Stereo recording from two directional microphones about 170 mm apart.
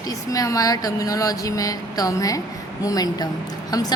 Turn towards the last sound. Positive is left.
turn(degrees=20)  # may be behind; listen again after turning